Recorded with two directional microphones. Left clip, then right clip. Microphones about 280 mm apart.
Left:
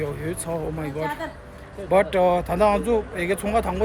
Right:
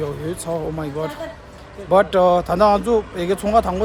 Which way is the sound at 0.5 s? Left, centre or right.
Centre.